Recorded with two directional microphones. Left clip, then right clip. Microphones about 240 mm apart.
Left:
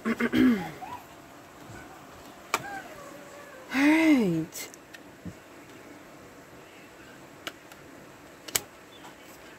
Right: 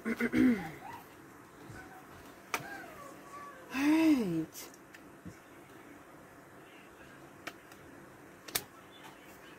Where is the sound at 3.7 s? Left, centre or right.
Left.